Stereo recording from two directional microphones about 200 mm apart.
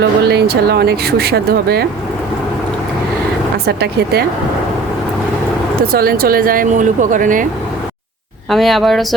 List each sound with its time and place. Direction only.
0.0 s speech: 55° right (ahead or behind)
3.7 s speech: 55° right (ahead or behind)
5.9 s speech: 50° right (ahead or behind)
8.4 s speech: centre (ahead or behind)